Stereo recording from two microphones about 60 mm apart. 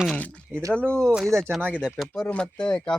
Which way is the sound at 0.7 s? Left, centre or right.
Right.